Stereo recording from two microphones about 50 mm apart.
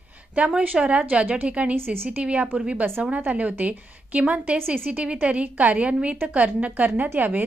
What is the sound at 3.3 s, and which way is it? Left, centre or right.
A woman's voice, right.